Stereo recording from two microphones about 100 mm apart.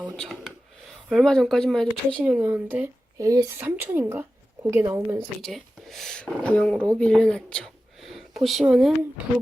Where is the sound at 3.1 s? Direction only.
35° right (ahead or behind).